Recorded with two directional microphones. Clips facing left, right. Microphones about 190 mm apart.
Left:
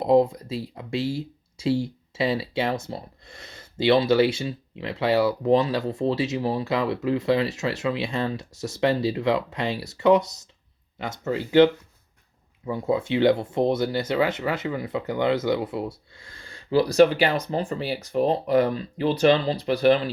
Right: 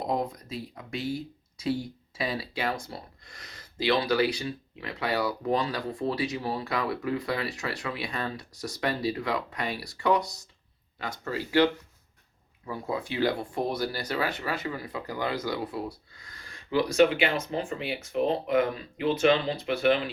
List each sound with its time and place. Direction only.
0.0 s speech: 25° left (ahead or behind)